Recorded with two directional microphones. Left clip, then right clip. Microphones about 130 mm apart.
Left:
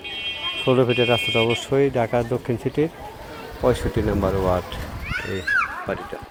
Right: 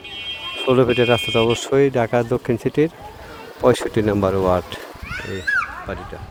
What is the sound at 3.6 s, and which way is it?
Speech, 65° right (ahead or behind).